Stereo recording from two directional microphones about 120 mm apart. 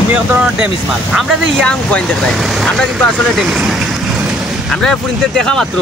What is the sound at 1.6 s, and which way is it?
Speech, 10° left (ahead or behind).